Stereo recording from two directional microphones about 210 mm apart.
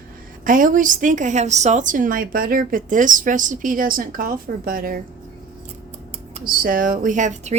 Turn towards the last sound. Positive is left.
turn(degrees=-35)  # may be behind; listen again after turning